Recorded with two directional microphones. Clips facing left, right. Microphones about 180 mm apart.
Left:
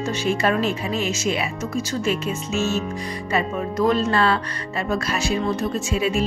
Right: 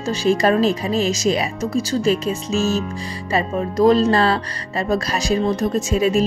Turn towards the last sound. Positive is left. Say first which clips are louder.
# right 5 dB
turn(degrees=-40)  # may be behind; listen again after turning